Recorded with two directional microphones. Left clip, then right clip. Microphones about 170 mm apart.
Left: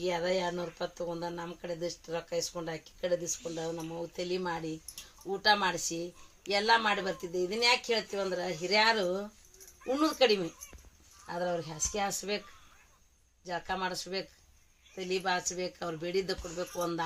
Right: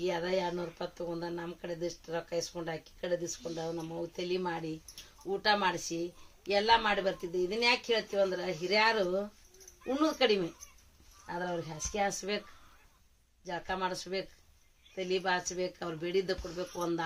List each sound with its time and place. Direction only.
0.0 s speech: 15° right (ahead or behind)
13.4 s speech: 10° right (ahead or behind)